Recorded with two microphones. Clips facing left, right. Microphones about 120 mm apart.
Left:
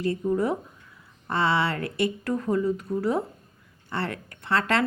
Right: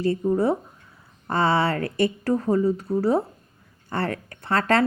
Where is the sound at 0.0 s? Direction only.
30° right (ahead or behind).